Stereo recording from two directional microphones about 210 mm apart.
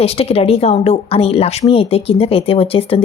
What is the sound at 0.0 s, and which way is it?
Speech, 30° left (ahead or behind).